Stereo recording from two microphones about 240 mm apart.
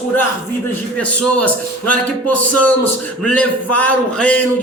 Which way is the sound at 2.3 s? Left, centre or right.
Left.